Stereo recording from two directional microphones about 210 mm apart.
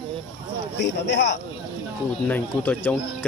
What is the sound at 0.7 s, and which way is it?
Speech, 55° left (ahead or behind).